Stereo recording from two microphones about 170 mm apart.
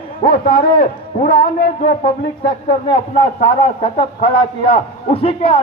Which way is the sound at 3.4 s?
35° left (ahead or behind).